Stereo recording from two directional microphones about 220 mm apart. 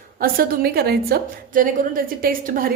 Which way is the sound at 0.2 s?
45° right (ahead or behind).